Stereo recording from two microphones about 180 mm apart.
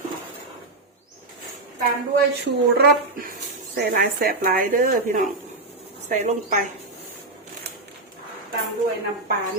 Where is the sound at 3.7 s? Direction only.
55° right (ahead or behind).